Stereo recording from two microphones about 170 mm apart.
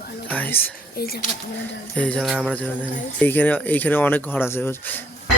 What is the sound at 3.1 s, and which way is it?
Speech, 10° left (ahead or behind).